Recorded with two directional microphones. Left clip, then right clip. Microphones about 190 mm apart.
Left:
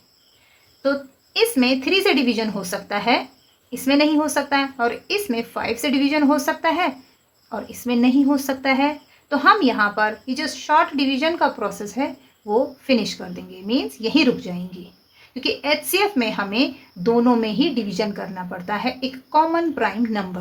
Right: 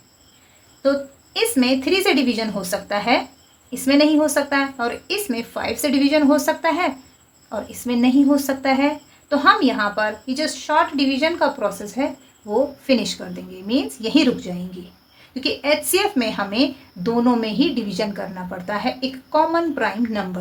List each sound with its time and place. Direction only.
0.8 s a woman's voice: 15° left (ahead or behind)